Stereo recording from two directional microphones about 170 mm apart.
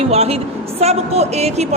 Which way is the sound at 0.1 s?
35° right (ahead or behind).